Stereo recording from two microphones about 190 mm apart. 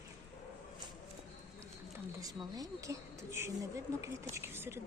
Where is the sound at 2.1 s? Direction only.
20° right (ahead or behind).